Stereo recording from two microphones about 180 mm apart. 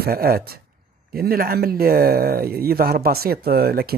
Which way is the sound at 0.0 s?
60° right (ahead or behind).